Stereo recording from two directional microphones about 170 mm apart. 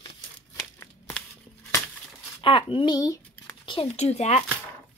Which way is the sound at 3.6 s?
35° left (ahead or behind).